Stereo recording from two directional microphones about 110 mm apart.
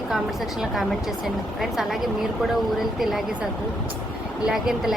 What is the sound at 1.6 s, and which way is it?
Speech, centre (ahead or behind).